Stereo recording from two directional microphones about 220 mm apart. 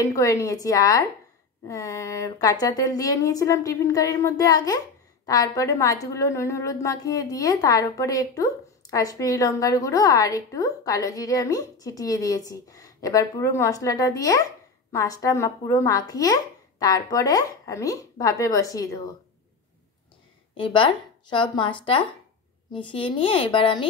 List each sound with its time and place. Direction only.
0.0 s a woman's voice: 15° left (ahead or behind)
20.5 s speech: 25° left (ahead or behind)